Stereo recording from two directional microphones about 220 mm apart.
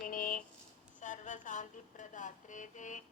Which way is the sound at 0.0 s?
40° left (ahead or behind).